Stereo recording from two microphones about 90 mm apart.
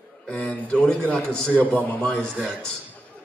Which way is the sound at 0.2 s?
15° left (ahead or behind).